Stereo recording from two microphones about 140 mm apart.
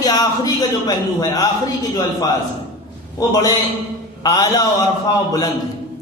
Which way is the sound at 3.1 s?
25° left (ahead or behind).